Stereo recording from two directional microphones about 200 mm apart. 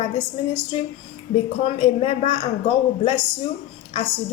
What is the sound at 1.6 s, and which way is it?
Speech, 30° left (ahead or behind).